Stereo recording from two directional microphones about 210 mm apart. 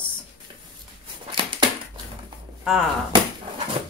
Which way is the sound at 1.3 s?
20° right (ahead or behind).